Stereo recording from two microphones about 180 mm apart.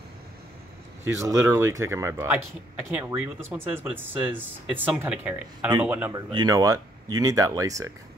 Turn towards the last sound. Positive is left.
turn(degrees=-20)  # may be behind; listen again after turning